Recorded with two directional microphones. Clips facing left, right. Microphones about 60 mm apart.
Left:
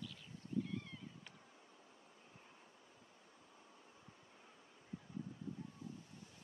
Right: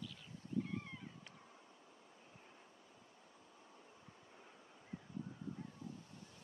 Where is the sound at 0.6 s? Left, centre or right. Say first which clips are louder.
Even; right.